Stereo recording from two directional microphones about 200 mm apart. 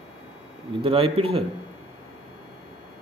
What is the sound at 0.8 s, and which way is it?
Speech, 25° right (ahead or behind).